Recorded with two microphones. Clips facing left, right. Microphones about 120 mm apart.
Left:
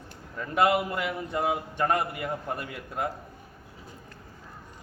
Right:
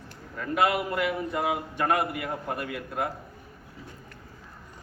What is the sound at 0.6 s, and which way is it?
A man's voice, 30° left (ahead or behind).